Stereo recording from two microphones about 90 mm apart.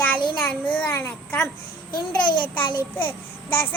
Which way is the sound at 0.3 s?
15° left (ahead or behind).